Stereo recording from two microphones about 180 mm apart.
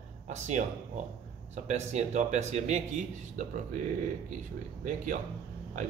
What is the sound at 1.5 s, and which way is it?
Speech, 40° right (ahead or behind).